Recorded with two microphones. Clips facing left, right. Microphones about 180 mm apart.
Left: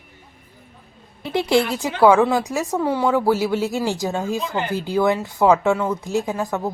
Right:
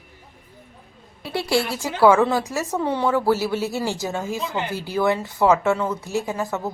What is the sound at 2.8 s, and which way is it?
Speech, 5° left (ahead or behind).